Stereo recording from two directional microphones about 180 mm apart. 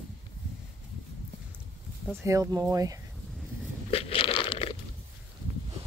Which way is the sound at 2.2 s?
15° right (ahead or behind).